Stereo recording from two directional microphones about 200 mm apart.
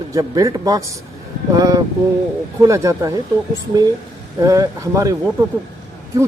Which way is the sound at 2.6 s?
15° right (ahead or behind).